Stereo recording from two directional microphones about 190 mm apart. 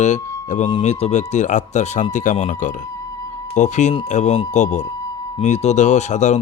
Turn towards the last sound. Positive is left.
turn(degrees=40)  # may be behind; listen again after turning